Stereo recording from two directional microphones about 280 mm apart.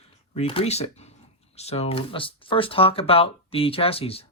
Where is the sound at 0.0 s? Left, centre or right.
Left.